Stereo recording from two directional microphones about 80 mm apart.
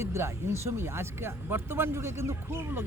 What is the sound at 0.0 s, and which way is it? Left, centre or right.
Speech, right.